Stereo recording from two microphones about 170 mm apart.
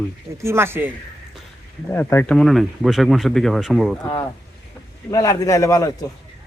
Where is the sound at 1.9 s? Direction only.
10° left (ahead or behind).